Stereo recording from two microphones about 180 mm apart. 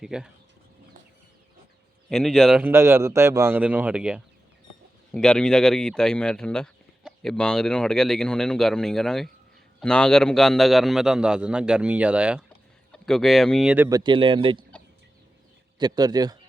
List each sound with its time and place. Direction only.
0.0 s speech: 5° right (ahead or behind)
2.0 s a man's voice: centre (ahead or behind)
13.7 s speech: 15° right (ahead or behind)
15.8 s speech: 20° right (ahead or behind)